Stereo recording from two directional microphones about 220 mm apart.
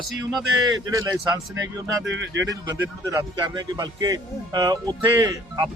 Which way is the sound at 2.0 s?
55° right (ahead or behind).